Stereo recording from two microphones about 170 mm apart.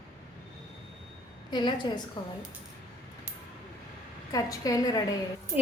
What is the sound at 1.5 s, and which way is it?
Speech, 25° left (ahead or behind).